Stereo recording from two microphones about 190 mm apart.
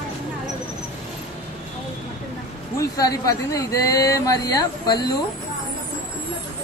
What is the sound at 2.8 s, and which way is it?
Speech, 20° left (ahead or behind).